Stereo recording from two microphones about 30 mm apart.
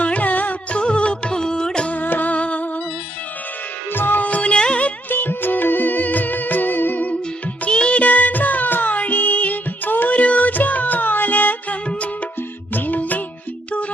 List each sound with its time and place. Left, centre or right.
0.0 s music: left
0.7 s music: left
1.4 s music: left
1.9 s music: left
4.1 s music: left
4.5 s music: left
5.0 s music: left
7.7 s music: left
8.0 s music: left
10.2 s music: left